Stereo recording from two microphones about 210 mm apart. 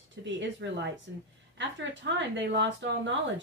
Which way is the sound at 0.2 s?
60° right (ahead or behind).